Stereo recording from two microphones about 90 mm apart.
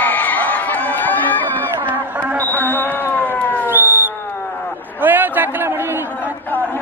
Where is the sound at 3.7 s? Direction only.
20° right (ahead or behind).